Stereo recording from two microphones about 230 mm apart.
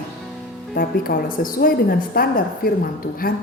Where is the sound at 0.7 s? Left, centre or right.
Left.